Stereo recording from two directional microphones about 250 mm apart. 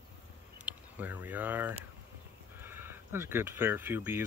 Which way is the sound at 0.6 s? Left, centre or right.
Centre.